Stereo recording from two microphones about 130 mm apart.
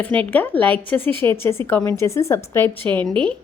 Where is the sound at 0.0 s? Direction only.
10° left (ahead or behind).